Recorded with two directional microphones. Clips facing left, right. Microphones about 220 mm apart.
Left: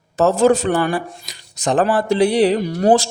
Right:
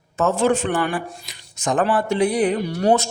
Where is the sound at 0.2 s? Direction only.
40° left (ahead or behind).